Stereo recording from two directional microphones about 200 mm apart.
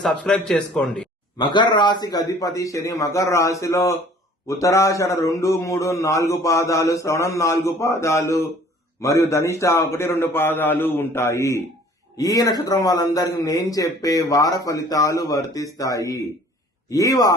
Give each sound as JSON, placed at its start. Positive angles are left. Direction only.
{"t": 0.0, "sound": "a man's voice", "side_deg": 5}
{"t": 1.4, "sound": "a man's voice", "side_deg": 20}